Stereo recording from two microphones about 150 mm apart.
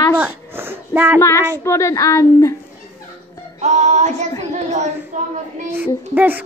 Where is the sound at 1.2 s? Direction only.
20° left (ahead or behind).